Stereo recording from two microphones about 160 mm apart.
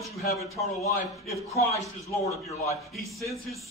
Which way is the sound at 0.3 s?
20° right (ahead or behind).